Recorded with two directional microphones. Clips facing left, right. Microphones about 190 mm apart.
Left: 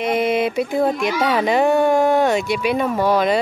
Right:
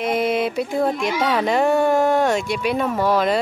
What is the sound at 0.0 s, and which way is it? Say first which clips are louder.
A child's voice: left 2 dB; centre (ahead or behind).